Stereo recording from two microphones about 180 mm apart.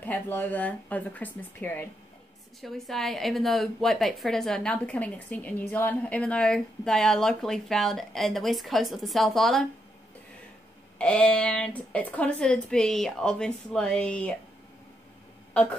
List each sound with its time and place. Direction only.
0.0 s a woman's voice: 10° left (ahead or behind)
11.0 s a woman's voice: 5° left (ahead or behind)